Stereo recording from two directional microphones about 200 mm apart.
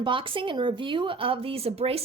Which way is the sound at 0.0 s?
25° right (ahead or behind).